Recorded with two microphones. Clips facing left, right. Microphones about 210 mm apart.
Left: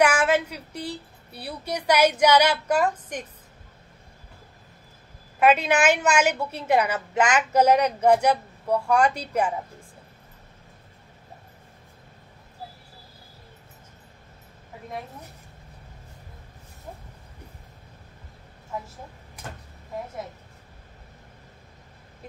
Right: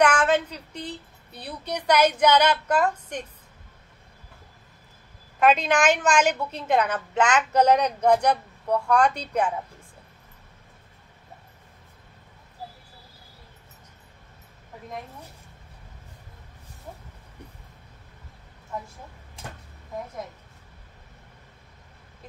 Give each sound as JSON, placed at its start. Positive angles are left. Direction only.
{"t": 0.0, "sound": "a woman's voice", "side_deg": 10}
{"t": 5.4, "sound": "a woman's voice", "side_deg": 5}
{"t": 19.4, "sound": "a sound", "side_deg": -25}